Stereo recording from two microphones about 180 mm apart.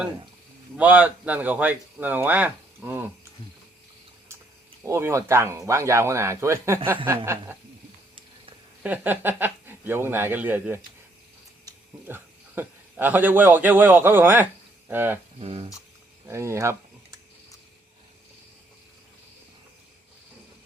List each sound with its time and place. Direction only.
0.8 s speech: 10° right (ahead or behind)
4.9 s speech: 15° right (ahead or behind)
8.8 s a man's voice: 10° right (ahead or behind)
14.8 s a sound: 10° right (ahead or behind)
15.4 s speech: 30° right (ahead or behind)
16.2 s speech: 15° right (ahead or behind)